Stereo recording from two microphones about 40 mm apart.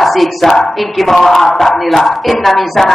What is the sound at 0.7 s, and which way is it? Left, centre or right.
Speech, centre.